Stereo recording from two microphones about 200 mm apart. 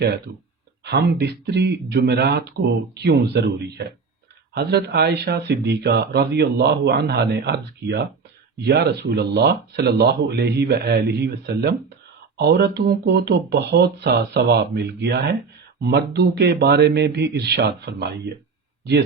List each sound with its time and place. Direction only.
0.9 s speech: 55° right (ahead or behind)